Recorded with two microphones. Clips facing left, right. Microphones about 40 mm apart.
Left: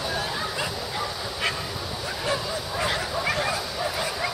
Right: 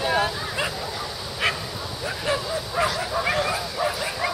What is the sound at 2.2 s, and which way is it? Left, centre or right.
Bow-wow, centre.